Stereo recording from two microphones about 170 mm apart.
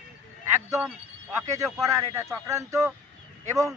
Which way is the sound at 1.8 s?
20° right (ahead or behind).